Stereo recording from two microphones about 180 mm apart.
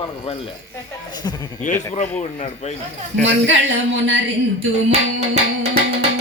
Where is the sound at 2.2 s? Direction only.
40° left (ahead or behind).